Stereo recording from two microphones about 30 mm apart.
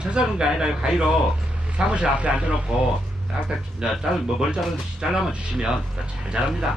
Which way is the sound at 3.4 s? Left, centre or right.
Right.